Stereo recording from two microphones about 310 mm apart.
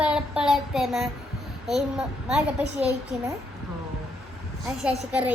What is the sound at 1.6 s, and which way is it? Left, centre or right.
A woman's voice, centre.